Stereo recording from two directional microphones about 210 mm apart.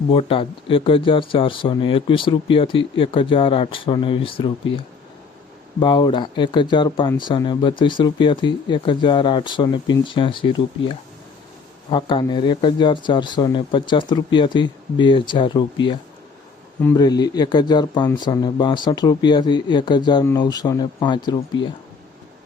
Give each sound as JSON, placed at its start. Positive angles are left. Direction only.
{"t": 0.1, "sound": "speech", "side_deg": 25}
{"t": 5.8, "sound": "speech", "side_deg": 20}
{"t": 16.8, "sound": "speech", "side_deg": 15}